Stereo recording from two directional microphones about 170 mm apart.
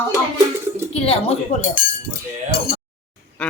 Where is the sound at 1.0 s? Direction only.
35° left (ahead or behind).